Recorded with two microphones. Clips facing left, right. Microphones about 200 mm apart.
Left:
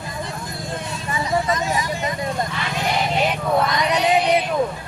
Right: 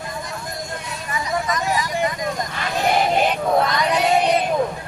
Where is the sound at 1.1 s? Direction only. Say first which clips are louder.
Left 2 dB; 25° left (ahead or behind).